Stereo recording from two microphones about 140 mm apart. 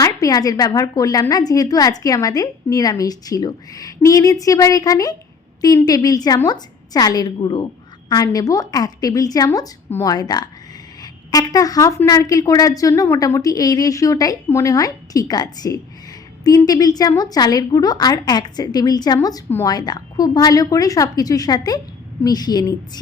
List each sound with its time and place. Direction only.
0.0 s a woman's voice: 25° left (ahead or behind)